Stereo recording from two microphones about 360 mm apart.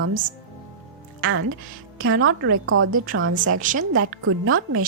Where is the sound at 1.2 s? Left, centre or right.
Right.